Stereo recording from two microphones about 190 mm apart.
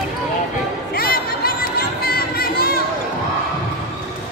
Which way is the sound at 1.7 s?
50° left (ahead or behind).